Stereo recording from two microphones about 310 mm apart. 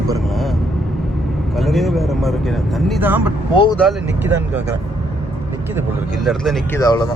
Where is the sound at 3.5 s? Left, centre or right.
Centre.